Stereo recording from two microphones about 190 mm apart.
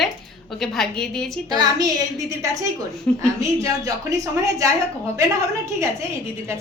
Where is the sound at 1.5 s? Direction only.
20° right (ahead or behind).